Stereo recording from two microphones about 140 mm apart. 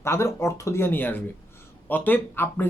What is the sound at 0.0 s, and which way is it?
Speech, 20° left (ahead or behind).